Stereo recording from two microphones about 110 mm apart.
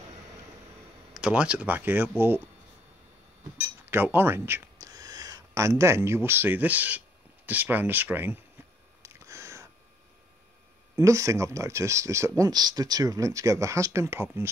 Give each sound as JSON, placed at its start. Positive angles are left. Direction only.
{"t": 1.1, "sound": "speech", "side_deg": -10}
{"t": 3.8, "sound": "speech", "side_deg": -20}
{"t": 9.0, "sound": "a sound", "side_deg": -25}
{"t": 11.0, "sound": "speech", "side_deg": -25}